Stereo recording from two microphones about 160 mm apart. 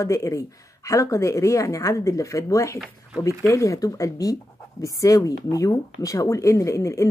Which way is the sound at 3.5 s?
20° left (ahead or behind).